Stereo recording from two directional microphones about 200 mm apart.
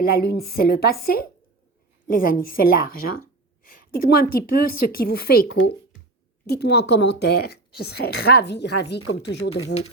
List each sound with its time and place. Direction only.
0.0 s speech: 50° left (ahead or behind)
6.5 s a woman's voice: 55° left (ahead or behind)